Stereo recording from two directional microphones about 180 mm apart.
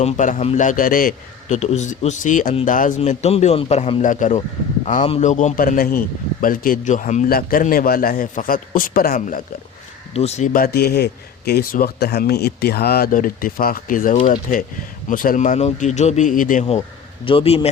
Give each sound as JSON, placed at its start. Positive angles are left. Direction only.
{"t": 0.0, "sound": "a man's voice", "side_deg": 40}
{"t": 4.0, "sound": "a man's voice", "side_deg": 45}
{"t": 10.2, "sound": "a man's voice", "side_deg": 35}
{"t": 17.2, "sound": "a man's voice", "side_deg": 30}